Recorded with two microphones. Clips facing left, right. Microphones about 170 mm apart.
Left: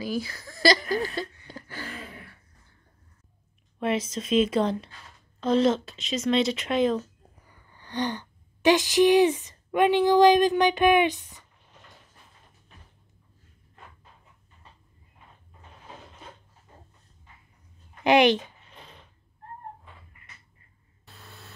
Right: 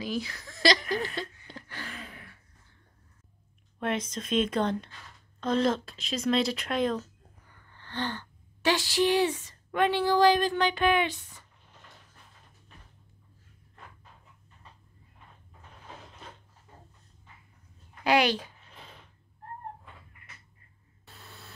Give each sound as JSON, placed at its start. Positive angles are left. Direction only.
{"t": 0.0, "sound": "speech", "side_deg": 5}
{"t": 3.8, "sound": "a woman's voice", "side_deg": 5}
{"t": 18.0, "sound": "a child's voice", "side_deg": 20}